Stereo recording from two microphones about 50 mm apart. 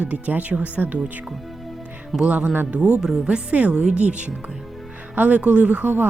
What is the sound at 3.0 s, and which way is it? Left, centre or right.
Speech, centre.